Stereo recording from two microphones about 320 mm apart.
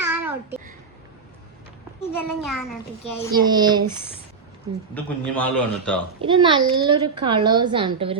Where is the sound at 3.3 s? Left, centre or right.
Centre.